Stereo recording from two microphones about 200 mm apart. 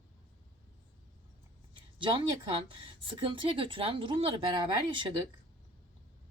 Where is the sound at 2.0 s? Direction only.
25° right (ahead or behind).